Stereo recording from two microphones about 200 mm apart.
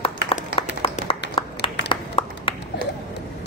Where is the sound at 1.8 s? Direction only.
25° left (ahead or behind).